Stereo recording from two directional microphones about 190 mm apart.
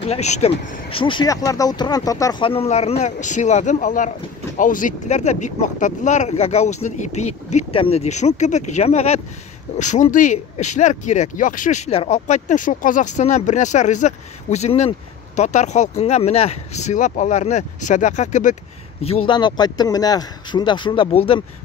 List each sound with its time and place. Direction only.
0.0 s speech: 35° left (ahead or behind)
19.0 s speech: 30° left (ahead or behind)